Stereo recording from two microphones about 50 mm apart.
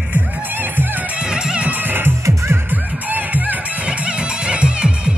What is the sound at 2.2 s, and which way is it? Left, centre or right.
Music, right.